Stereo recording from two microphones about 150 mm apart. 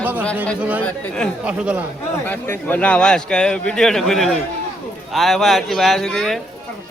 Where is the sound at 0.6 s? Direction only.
10° right (ahead or behind).